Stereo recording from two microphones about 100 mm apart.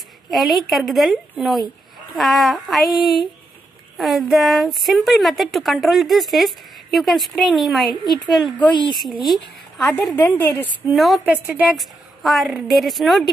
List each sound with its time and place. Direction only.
0.3 s a woman's voice: centre (ahead or behind)
9.8 s a woman's voice: 15° left (ahead or behind)
10.9 s speech: centre (ahead or behind)
11.2 s a woman's voice: 15° right (ahead or behind)
11.6 s speech: centre (ahead or behind)